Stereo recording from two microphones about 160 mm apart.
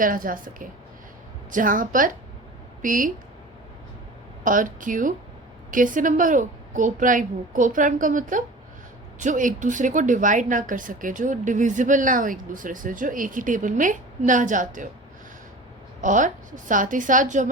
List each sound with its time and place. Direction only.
0.0 s speech: 60° right (ahead or behind)
4.4 s speech: 55° right (ahead or behind)
16.0 s a woman's voice: 50° right (ahead or behind)